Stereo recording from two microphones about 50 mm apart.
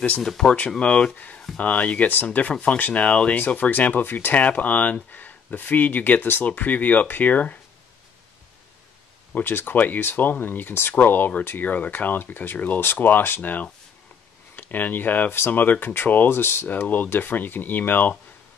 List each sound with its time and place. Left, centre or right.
0.4 s speech: centre
9.4 s speech: left
12.8 s speech: left
16.8 s speech: left